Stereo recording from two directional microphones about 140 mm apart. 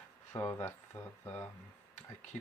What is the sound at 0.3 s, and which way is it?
Speech, 20° left (ahead or behind).